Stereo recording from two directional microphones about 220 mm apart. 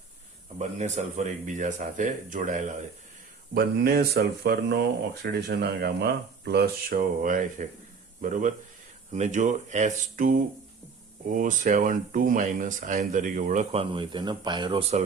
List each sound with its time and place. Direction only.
0.8 s speech: 35° right (ahead or behind)
3.5 s speech: 45° right (ahead or behind)
13.9 s speech: 20° right (ahead or behind)